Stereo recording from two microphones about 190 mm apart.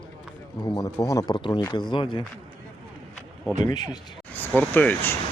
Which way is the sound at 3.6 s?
20° left (ahead or behind).